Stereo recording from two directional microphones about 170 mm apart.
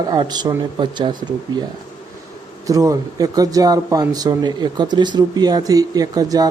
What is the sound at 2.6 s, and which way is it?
Speech, 20° right (ahead or behind).